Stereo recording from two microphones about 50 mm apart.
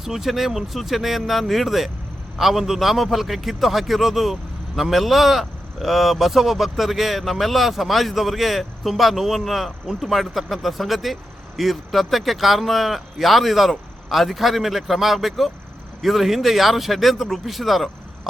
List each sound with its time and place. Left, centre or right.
0.0 s a man's voice: centre